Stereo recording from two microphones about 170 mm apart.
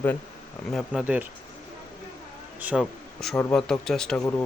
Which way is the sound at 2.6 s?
Centre (ahead or behind).